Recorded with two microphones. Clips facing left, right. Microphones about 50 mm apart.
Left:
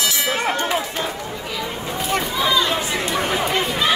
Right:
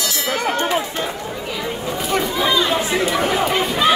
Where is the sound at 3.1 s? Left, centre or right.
Centre.